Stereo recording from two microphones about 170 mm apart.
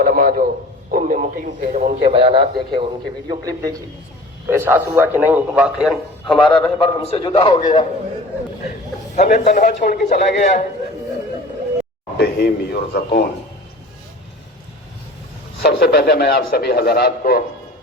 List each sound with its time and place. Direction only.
0.0 s a sound: 55° right (ahead or behind)
0.9 s a man's voice: 50° right (ahead or behind)
1.7 s a man's voice: 40° right (ahead or behind); by 6.4 s centre (ahead or behind)
6.4 s a man's voice: 30° left (ahead or behind)
9.1 s a man's voice: 45° left (ahead or behind)
12.1 s a man's voice: 75° left (ahead or behind)
15.6 s a man's voice: 70° left (ahead or behind)